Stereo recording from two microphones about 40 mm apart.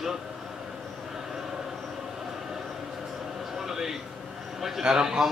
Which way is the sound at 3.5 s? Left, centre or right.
Centre.